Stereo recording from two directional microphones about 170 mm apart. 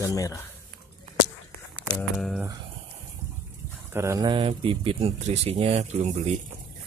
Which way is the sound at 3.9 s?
20° right (ahead or behind).